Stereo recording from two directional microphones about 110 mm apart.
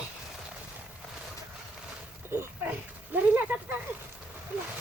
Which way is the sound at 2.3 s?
20° right (ahead or behind).